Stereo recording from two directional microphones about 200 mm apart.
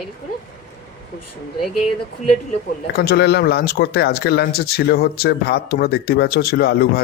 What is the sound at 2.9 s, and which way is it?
Speech, 55° left (ahead or behind).